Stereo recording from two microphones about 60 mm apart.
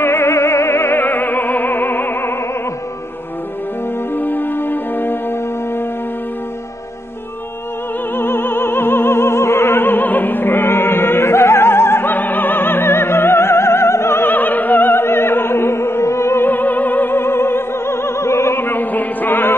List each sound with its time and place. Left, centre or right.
0.0 s music: left
4.1 s music: left
8.2 s opera: left
16.4 s opera: left